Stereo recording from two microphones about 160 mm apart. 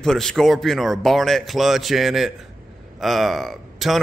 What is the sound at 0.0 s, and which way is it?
A man's voice, 5° left (ahead or behind).